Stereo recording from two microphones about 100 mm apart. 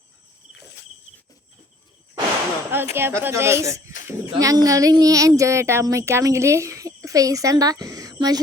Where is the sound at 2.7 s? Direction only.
25° right (ahead or behind); by 8.3 s 40° right (ahead or behind).